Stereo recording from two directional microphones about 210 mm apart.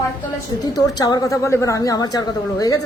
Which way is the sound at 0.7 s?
15° left (ahead or behind).